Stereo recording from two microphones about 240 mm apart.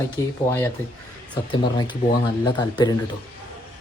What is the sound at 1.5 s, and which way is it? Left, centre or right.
Speech, centre.